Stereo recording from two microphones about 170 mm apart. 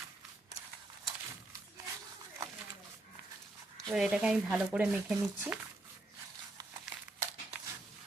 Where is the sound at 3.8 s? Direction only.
5° right (ahead or behind).